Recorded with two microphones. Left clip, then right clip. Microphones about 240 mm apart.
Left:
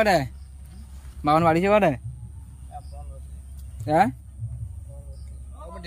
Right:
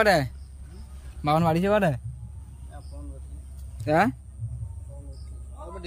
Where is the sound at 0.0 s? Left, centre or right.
Centre.